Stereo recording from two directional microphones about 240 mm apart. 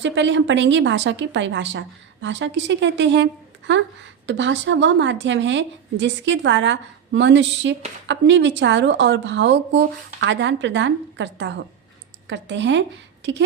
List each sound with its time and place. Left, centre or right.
0.0 s a woman's voice: right